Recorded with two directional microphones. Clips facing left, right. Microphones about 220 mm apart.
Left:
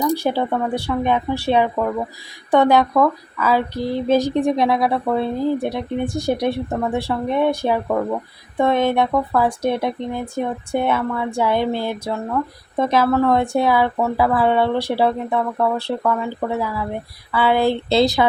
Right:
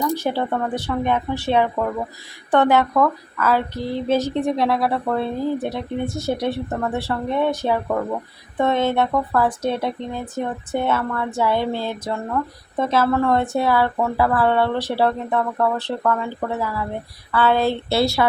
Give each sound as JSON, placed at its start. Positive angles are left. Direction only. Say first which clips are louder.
{"t": 0.2, "sound": "speech", "louder": "left 2 dB", "side_deg": 15}